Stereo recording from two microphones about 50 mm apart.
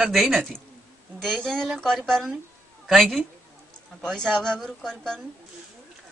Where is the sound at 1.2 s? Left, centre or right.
Centre.